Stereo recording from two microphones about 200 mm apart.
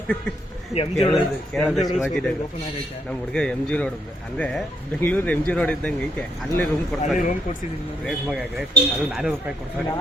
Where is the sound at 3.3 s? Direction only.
5° left (ahead or behind).